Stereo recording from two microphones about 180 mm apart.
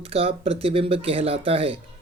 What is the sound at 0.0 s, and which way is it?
Speech, 30° right (ahead or behind).